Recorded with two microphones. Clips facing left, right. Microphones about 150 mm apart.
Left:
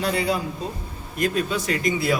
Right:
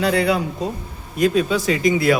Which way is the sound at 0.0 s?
70° right (ahead or behind).